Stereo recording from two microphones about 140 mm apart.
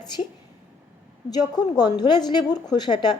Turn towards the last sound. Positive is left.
turn(degrees=30)  # may be behind; listen again after turning